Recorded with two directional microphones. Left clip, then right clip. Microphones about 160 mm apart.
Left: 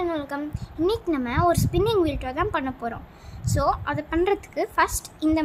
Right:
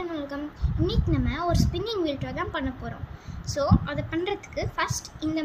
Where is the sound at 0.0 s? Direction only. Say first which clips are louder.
Left 5 dB; 90° left.